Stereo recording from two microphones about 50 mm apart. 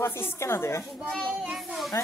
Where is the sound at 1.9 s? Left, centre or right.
Left.